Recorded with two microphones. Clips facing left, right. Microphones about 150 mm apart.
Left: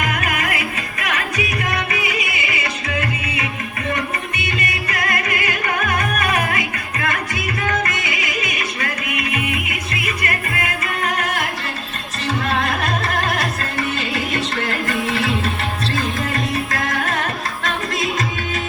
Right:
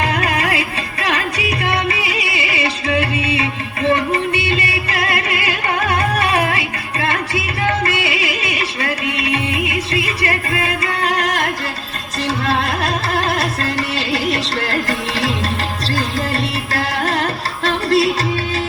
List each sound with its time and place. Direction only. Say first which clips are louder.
0.0 s music: right 4 dB; 30° right (ahead or behind)
12.5 s music: right 2 dB; 35° right (ahead or behind)